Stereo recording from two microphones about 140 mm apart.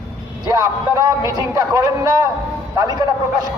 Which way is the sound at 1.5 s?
25° right (ahead or behind).